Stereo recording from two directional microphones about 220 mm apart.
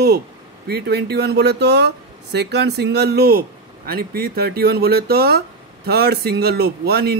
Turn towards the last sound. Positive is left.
turn(degrees=-45)  # may be behind; listen again after turning